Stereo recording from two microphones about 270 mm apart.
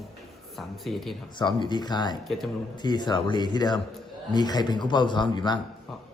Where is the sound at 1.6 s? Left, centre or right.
Centre.